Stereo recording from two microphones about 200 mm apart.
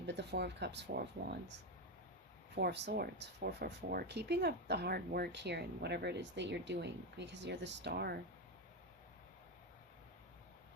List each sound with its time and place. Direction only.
0.0 s speech: 60° right (ahead or behind)
2.6 s speech: 55° right (ahead or behind)